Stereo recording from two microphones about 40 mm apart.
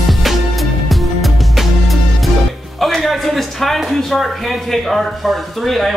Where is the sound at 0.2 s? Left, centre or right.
Centre.